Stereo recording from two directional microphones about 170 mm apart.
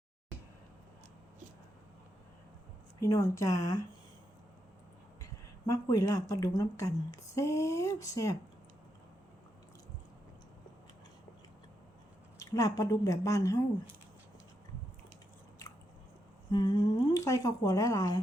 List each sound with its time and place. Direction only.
3.0 s a woman's voice: 20° left (ahead or behind)
5.2 s a woman's voice: 20° left (ahead or behind)
12.4 s a woman's voice: 20° left (ahead or behind)
16.5 s a woman's voice: 25° left (ahead or behind)